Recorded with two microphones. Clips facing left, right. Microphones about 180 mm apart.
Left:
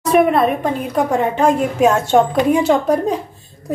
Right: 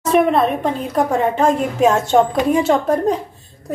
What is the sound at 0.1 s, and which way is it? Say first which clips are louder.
A woman's voice: left 1 dB; 5° left (ahead or behind).